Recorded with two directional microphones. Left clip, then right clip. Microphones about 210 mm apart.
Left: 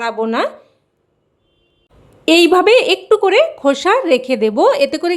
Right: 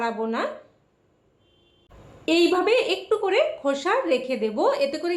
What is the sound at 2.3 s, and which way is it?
A woman's voice, 50° left (ahead or behind).